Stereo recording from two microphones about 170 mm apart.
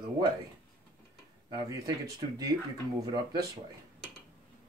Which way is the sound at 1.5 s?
20° right (ahead or behind).